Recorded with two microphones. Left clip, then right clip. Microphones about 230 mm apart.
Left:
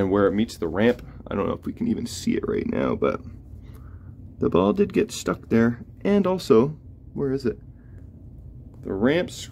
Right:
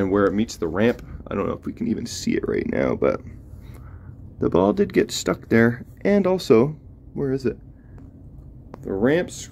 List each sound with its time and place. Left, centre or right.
0.0 s speech: centre
4.4 s speech: centre
8.8 s speech: centre